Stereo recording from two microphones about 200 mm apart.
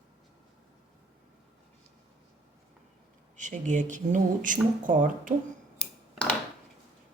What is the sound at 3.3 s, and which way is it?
Speech, 40° right (ahead or behind).